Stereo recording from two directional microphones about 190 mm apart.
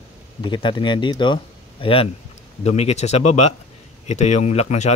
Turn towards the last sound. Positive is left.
turn(degrees=35)  # may be behind; listen again after turning